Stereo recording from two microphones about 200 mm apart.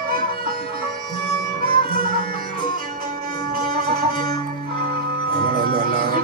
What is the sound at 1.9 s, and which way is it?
Sitar, 25° left (ahead or behind).